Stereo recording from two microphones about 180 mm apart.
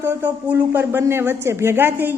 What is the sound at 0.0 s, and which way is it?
Speech, 10° right (ahead or behind).